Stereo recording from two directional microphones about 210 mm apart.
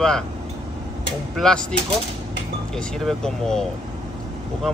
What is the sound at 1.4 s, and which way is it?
Speech, 5° left (ahead or behind).